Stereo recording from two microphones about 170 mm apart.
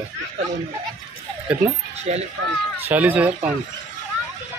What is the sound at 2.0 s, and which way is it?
Speech, 40° right (ahead or behind).